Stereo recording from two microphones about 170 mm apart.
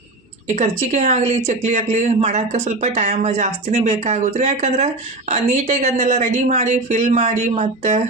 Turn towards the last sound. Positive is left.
turn(degrees=-40)  # may be behind; listen again after turning